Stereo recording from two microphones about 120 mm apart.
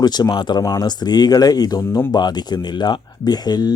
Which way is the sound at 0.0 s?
35° left (ahead or behind).